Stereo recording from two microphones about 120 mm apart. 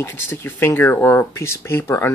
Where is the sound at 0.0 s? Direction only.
20° left (ahead or behind).